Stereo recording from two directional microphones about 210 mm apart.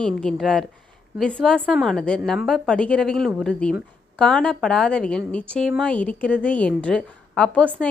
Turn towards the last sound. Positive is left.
turn(degrees=5)  # may be behind; listen again after turning